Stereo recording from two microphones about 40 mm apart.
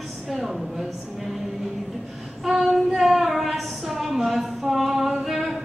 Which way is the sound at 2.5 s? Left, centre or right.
Centre.